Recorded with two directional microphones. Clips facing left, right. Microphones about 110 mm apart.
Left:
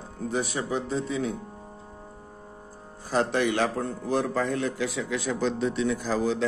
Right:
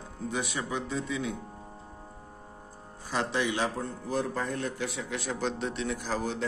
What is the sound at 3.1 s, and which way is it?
Speech, 50° left (ahead or behind).